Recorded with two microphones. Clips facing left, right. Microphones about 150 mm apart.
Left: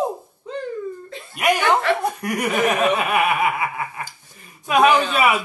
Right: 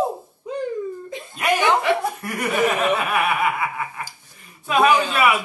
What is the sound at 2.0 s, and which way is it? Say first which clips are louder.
Speech: left 2 dB; 20° left (ahead or behind).